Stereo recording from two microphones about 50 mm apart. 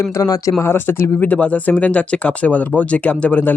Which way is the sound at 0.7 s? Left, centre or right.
Left.